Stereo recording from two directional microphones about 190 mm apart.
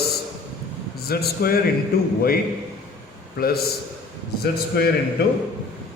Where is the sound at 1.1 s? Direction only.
55° left (ahead or behind).